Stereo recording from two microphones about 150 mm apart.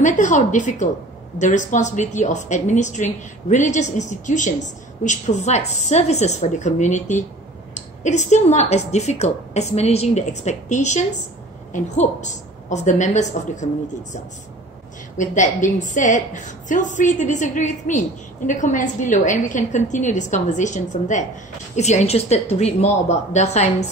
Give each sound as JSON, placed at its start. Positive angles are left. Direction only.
{"t": 0.0, "sound": "a woman's voice", "side_deg": 55}
{"t": 15.1, "sound": "a woman's voice", "side_deg": 55}